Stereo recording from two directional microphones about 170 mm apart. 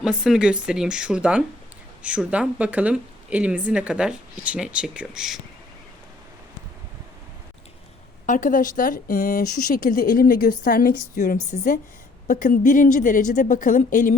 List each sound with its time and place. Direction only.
0.0 s speech: 5° right (ahead or behind)
8.3 s speech: 50° left (ahead or behind)